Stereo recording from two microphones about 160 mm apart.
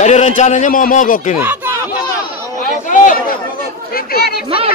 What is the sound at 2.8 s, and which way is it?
Chatter, 60° left (ahead or behind).